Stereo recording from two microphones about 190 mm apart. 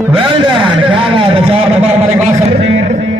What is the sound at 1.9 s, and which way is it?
Speech, 35° right (ahead or behind).